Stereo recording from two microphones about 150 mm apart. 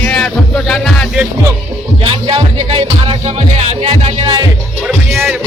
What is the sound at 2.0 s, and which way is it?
Speech, 40° right (ahead or behind).